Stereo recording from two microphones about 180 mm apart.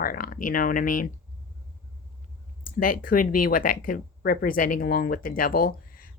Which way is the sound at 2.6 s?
50° left (ahead or behind).